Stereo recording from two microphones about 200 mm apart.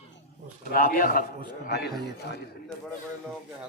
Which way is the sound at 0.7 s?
45° left (ahead or behind).